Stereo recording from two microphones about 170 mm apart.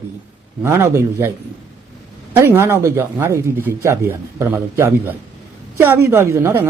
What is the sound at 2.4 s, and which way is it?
Speech, 15° right (ahead or behind).